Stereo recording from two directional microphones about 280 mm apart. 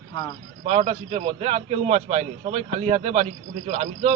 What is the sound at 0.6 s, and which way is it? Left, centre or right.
A man's voice, right.